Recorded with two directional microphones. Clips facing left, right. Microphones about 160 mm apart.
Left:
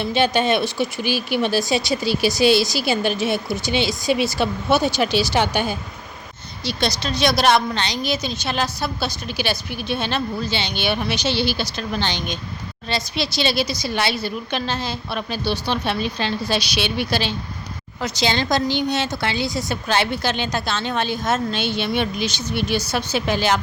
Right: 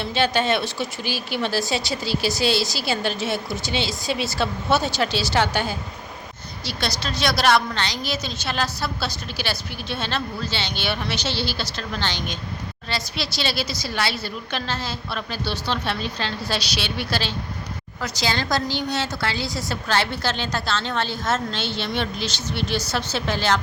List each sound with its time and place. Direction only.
0.0 s speech: 15° left (ahead or behind)